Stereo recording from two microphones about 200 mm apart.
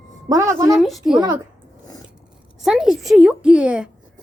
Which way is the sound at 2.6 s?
Centre (ahead or behind).